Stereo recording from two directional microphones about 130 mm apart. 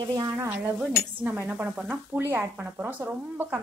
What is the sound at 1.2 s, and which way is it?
Speech, 15° right (ahead or behind).